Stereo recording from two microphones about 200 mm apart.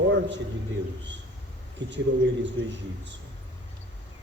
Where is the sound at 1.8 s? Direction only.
60° right (ahead or behind).